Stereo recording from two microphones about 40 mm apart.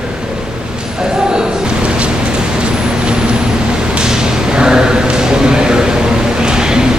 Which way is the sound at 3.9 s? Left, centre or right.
Centre.